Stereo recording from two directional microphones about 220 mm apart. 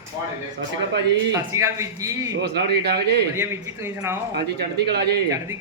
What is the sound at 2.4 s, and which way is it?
Speech, 50° right (ahead or behind).